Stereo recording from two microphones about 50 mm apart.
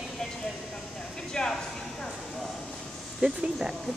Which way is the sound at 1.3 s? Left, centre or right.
Centre.